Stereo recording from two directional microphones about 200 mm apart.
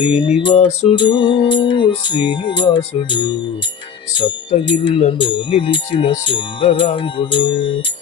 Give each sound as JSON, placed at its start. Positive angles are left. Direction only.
{"t": 0.1, "sound": "speech", "side_deg": 25}